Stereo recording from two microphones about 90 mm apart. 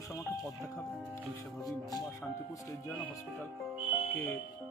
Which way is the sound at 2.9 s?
20° left (ahead or behind).